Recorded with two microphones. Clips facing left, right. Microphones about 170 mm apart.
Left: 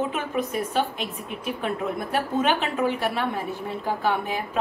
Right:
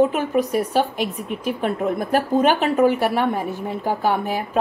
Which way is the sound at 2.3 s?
40° right (ahead or behind).